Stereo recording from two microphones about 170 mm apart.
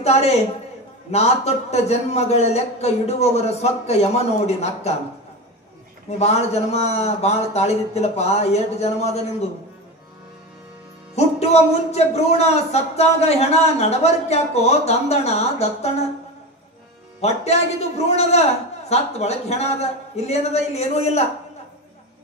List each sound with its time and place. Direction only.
0.0 s a man's voice: 40° left (ahead or behind)
6.0 s a man's voice: 40° left (ahead or behind)
11.1 s a man's voice: 40° left (ahead or behind)
17.2 s a man's voice: 40° left (ahead or behind)